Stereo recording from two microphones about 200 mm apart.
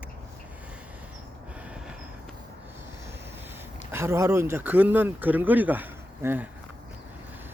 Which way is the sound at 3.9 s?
15° right (ahead or behind).